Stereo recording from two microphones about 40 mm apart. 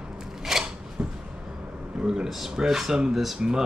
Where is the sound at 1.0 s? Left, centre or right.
Right.